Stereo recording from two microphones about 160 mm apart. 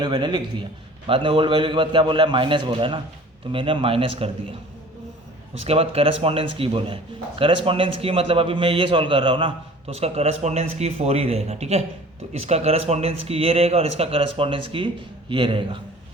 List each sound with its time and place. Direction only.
0.0 s a man's voice: 30° right (ahead or behind)
5.5 s speech: 40° right (ahead or behind)